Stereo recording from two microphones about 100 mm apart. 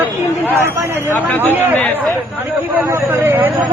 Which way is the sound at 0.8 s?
25° right (ahead or behind).